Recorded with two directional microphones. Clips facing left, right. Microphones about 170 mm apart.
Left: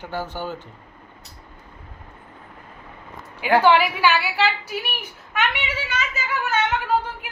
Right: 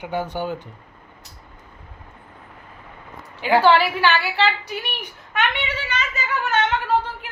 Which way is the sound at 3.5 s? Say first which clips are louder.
Right 1 dB; 15° left (ahead or behind).